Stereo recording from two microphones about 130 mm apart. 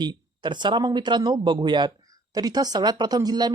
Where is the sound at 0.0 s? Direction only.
35° right (ahead or behind).